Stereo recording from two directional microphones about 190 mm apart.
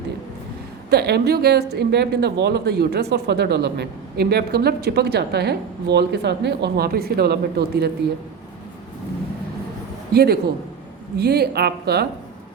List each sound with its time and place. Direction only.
0.9 s speech: 55° right (ahead or behind)
10.1 s a man's voice: 55° right (ahead or behind)